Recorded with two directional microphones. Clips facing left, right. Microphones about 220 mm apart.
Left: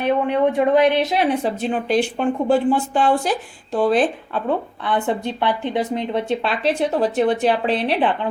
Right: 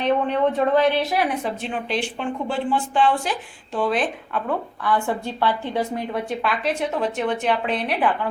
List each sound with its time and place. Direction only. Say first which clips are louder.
0.0 s speech: left 2 dB; 10° left (ahead or behind); by 8.3 s 25° left (ahead or behind)